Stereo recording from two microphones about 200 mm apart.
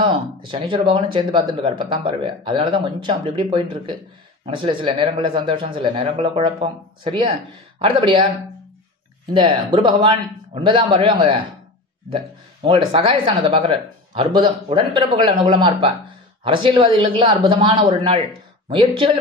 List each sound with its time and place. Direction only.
0.0 s speech: 25° right (ahead or behind)
9.3 s speech: 25° right (ahead or behind)
12.6 s speech: 25° right (ahead or behind)